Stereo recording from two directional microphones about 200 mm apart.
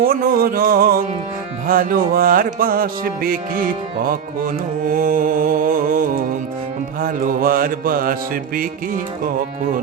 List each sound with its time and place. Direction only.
0.0 s music: 45° right (ahead or behind)
4.9 s music: 45° right (ahead or behind)